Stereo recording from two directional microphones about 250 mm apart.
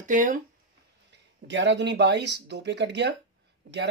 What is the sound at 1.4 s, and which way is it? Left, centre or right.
Speech, right.